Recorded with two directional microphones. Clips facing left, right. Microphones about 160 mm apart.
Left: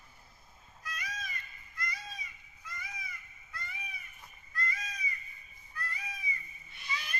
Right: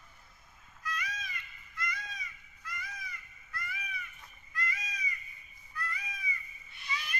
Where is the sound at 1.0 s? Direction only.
40° left (ahead or behind).